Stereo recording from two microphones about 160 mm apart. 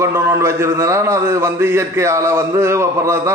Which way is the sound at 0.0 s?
15° right (ahead or behind).